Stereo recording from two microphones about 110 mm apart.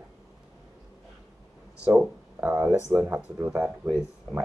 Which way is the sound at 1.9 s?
15° right (ahead or behind).